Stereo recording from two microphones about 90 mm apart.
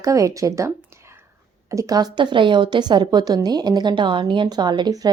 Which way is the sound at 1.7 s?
40° right (ahead or behind).